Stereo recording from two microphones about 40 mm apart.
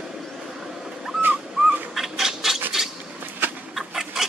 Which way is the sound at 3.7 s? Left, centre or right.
Centre.